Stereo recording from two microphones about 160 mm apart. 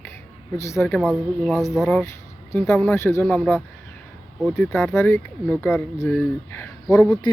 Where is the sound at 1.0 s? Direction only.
5° right (ahead or behind).